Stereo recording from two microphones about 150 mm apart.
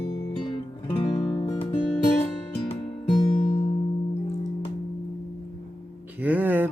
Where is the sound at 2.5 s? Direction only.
35° left (ahead or behind).